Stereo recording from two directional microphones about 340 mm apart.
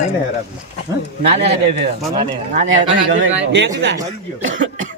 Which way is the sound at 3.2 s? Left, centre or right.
Right.